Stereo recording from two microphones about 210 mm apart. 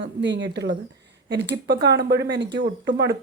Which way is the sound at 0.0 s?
60° right (ahead or behind).